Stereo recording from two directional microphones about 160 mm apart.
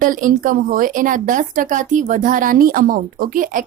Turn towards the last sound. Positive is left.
turn(degrees=-60)  # may be behind; listen again after turning